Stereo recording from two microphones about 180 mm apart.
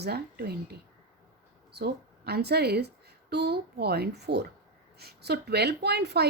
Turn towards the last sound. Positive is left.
turn(degrees=-65)  # may be behind; listen again after turning